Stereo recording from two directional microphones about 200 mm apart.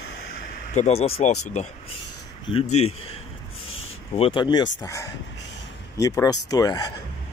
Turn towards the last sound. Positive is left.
turn(degrees=20)  # may be behind; listen again after turning